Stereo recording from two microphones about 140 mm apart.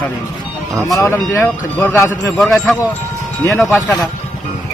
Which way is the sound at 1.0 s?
15° left (ahead or behind).